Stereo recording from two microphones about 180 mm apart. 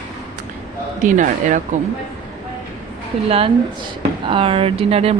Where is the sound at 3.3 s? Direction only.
30° right (ahead or behind).